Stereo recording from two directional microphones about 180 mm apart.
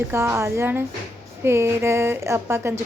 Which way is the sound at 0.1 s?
15° right (ahead or behind).